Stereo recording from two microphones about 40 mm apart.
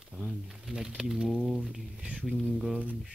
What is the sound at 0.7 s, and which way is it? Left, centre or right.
Speech, centre.